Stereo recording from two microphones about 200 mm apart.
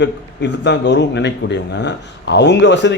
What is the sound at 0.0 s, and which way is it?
Speech, 60° left (ahead or behind).